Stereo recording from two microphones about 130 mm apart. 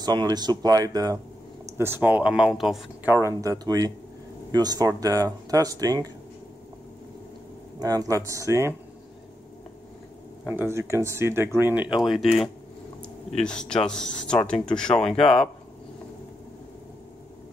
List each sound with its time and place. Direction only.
0.0 s speech: 35° right (ahead or behind)
1.8 s speech: 15° right (ahead or behind)
3.1 s speech: 25° right (ahead or behind)
7.8 s speech: 25° right (ahead or behind)
10.4 s speech: 15° right (ahead or behind); by 15.2 s 5° left (ahead or behind)